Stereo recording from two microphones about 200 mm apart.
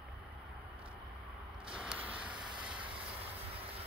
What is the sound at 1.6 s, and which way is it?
Vehicle, 5° right (ahead or behind).